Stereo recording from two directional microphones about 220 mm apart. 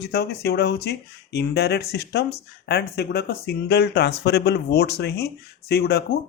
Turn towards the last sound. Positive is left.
turn(degrees=45)  # may be behind; listen again after turning